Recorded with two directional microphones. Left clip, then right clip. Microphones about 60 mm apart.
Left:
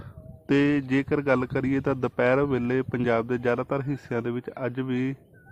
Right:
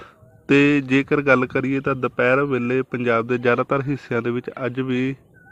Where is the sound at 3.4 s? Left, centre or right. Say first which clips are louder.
Right 7 dB; right.